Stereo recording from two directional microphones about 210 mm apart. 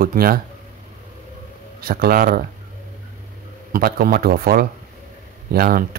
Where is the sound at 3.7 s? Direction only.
45° right (ahead or behind).